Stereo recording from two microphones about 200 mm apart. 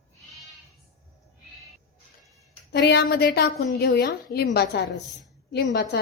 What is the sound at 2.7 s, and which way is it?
A woman's voice, 55° left (ahead or behind).